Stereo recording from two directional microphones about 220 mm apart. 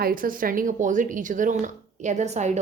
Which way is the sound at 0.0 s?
40° right (ahead or behind).